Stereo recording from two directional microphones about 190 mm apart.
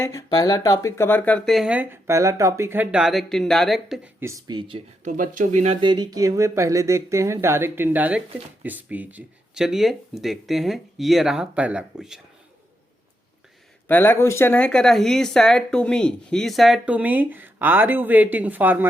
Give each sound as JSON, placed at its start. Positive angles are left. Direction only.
{"t": 0.0, "sound": "speech", "side_deg": 15}
{"t": 4.2, "sound": "speech", "side_deg": -15}
{"t": 5.0, "sound": "speech", "side_deg": -45}
{"t": 5.8, "sound": "speech", "side_deg": -25}
{"t": 13.8, "sound": "speech", "side_deg": 10}